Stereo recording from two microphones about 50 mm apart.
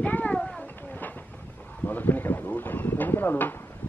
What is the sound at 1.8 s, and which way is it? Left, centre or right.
Speech, left.